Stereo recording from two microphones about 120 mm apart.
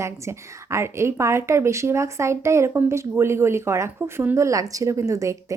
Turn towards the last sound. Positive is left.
turn(degrees=-25)  # may be behind; listen again after turning